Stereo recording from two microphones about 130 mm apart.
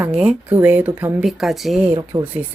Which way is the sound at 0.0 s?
5° right (ahead or behind).